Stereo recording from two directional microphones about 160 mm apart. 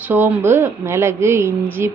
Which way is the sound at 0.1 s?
15° right (ahead or behind).